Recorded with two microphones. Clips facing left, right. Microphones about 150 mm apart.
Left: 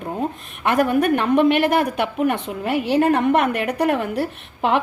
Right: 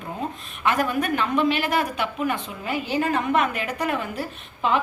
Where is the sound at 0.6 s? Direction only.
60° left (ahead or behind).